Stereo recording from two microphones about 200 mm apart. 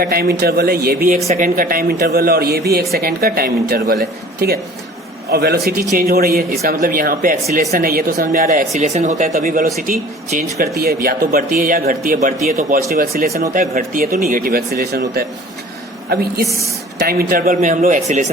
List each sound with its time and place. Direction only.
0.0 s speech: 50° right (ahead or behind)